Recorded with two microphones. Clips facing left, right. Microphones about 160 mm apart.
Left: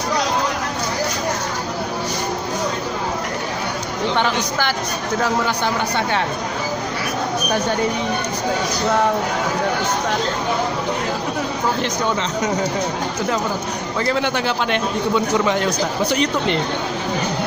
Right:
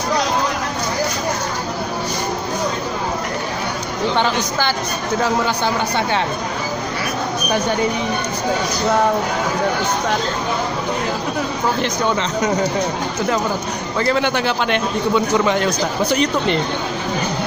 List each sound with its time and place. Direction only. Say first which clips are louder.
4.2 s speech: right 1 dB; 30° right (ahead or behind)
14.0 s a man's voice: right 2 dB; 65° right (ahead or behind)